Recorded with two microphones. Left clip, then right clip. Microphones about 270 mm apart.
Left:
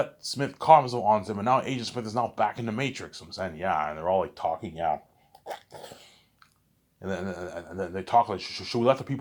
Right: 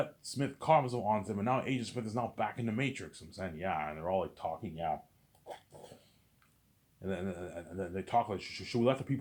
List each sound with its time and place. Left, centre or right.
0.0 s speech: centre
5.5 s dog: left
7.0 s speech: centre